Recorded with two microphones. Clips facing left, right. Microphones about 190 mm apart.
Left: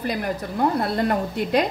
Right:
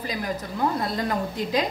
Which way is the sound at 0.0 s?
60° left (ahead or behind).